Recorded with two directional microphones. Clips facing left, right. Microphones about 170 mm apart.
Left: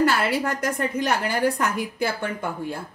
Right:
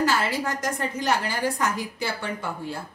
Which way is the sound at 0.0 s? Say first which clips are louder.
Left 3 dB; 60° left (ahead or behind).